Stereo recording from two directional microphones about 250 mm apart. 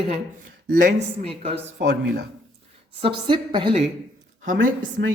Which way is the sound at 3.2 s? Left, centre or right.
Centre.